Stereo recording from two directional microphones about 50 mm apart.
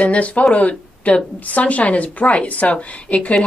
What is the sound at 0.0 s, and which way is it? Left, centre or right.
Speech, left.